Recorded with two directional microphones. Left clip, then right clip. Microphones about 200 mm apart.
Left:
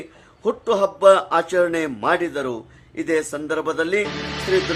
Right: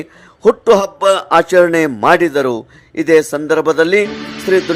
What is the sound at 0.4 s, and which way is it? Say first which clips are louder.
A man's voice: right 10 dB; 40° right (ahead or behind).